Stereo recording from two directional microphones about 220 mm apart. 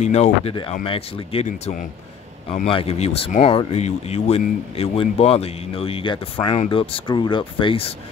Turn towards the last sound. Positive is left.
turn(degrees=25)  # may be behind; listen again after turning